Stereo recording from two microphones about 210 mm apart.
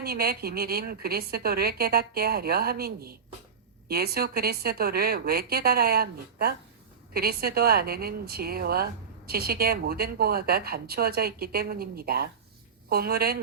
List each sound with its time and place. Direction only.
0.0 s speech: 45° right (ahead or behind)